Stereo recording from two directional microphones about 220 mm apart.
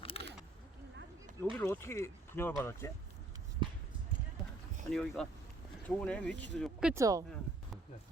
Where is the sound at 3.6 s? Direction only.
20° right (ahead or behind).